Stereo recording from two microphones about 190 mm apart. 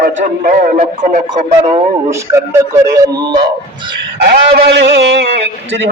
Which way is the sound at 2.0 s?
15° right (ahead or behind).